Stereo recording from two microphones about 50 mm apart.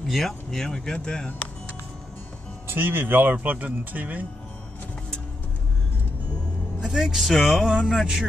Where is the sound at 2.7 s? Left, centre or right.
Right.